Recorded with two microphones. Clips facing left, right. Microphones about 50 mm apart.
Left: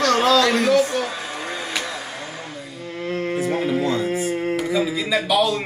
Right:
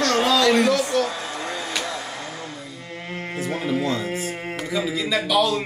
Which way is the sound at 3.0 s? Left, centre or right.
Centre.